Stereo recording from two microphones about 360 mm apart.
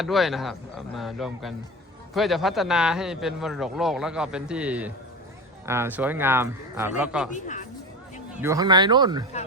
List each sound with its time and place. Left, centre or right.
0.0 s a man's voice: centre
7.4 s speech: centre
8.4 s speech: centre